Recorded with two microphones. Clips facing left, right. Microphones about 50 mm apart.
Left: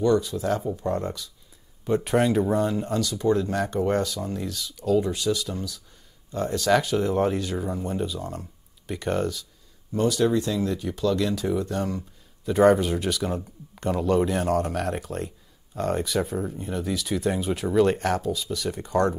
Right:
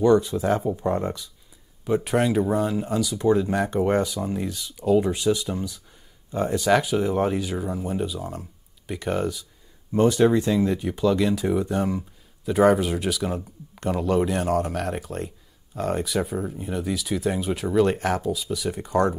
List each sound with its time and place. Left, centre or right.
0.0 s speech: right
1.9 s speech: centre
9.9 s speech: right
12.4 s speech: centre